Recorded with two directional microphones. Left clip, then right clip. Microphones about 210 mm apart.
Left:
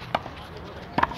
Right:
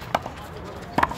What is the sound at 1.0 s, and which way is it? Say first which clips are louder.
Clip-clop: right 2 dB; centre (ahead or behind).